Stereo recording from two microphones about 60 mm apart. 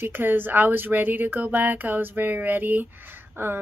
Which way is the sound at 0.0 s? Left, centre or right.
Right.